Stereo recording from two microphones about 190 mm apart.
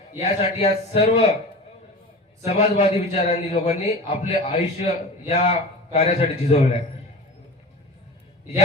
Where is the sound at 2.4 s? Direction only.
35° left (ahead or behind).